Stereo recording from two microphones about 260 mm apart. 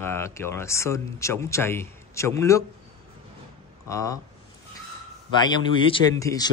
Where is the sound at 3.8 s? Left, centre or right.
Centre.